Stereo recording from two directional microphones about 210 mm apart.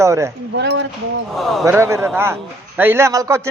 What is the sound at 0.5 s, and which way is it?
Speech, 55° right (ahead or behind).